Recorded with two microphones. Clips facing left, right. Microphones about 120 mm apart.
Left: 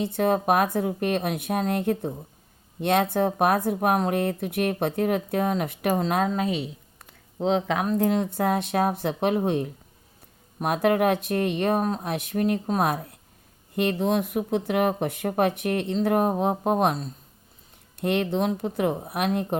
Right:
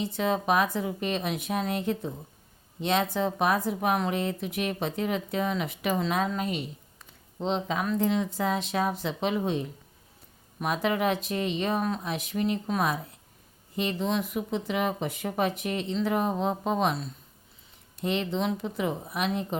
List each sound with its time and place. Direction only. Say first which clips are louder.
0.0 s speech: left 5 dB; 55° left (ahead or behind)
7.4 s speech: left 5 dB; 55° left (ahead or behind)